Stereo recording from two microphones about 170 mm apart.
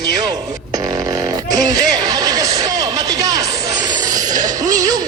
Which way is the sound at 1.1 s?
20° right (ahead or behind).